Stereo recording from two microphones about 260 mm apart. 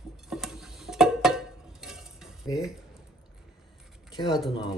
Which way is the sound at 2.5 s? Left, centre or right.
Centre.